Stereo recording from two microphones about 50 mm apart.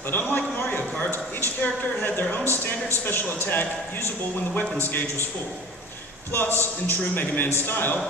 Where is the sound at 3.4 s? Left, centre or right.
Left.